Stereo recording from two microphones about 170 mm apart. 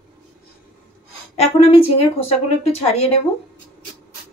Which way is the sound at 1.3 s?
40° left (ahead or behind).